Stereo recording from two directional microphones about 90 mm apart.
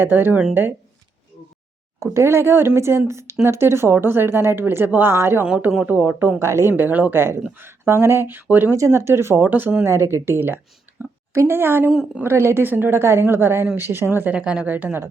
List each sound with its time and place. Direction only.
0.0 s speech: 20° right (ahead or behind)
2.1 s a woman's voice: 30° right (ahead or behind)
5.5 s speech: 15° right (ahead or behind)
8.7 s speech: 30° right (ahead or behind)
11.0 s a sound: 25° right (ahead or behind)
11.3 s speech: 25° right (ahead or behind)
14.3 s speech: 10° right (ahead or behind)